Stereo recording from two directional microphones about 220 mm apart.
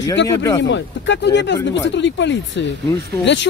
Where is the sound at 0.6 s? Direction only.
55° left (ahead or behind).